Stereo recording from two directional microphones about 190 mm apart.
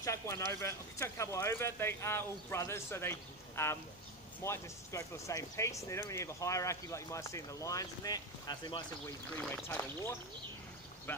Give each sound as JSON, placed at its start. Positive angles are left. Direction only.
{"t": 0.0, "sound": "speech", "side_deg": 15}
{"t": 9.4, "sound": "speech", "side_deg": 5}
{"t": 11.1, "sound": "speech", "side_deg": 10}